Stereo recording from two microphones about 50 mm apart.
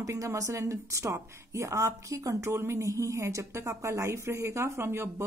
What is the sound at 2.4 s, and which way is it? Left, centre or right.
A woman's voice, right.